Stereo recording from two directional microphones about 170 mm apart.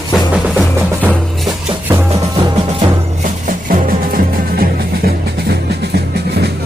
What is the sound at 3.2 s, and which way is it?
Music, 50° right (ahead or behind).